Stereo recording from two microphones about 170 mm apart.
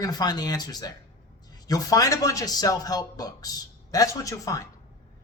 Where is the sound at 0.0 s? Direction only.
25° left (ahead or behind).